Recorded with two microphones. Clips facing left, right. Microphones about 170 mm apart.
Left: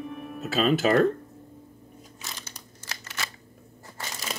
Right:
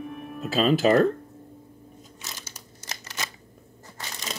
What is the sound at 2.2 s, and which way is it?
Crumpling, 5° right (ahead or behind).